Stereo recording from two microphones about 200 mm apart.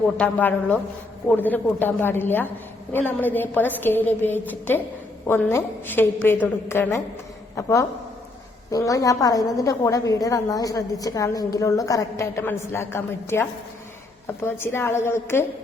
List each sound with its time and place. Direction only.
0.2 s a woman's voice: 10° left (ahead or behind)